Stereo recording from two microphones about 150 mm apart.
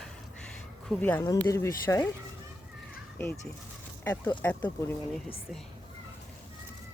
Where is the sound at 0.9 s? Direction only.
10° left (ahead or behind).